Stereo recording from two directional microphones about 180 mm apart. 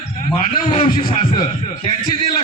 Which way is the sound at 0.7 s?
30° left (ahead or behind).